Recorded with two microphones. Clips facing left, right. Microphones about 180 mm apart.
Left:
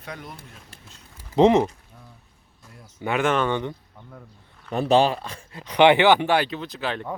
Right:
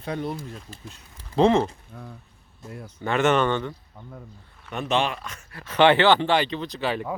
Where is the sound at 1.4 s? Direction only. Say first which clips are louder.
Left 2 dB; 20° left (ahead or behind).